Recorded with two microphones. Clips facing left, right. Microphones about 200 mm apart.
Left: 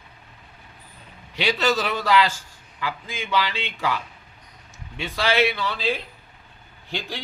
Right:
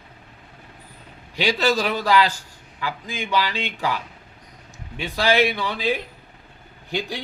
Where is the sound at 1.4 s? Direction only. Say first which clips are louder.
Right 2 dB; 10° right (ahead or behind).